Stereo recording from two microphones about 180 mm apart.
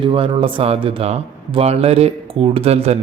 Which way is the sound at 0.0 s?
30° right (ahead or behind).